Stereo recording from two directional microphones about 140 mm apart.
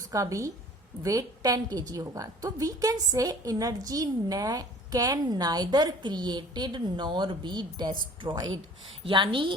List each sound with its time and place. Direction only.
0.1 s a woman's voice: 25° right (ahead or behind)